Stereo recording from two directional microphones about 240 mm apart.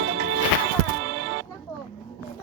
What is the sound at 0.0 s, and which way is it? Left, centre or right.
Music, right.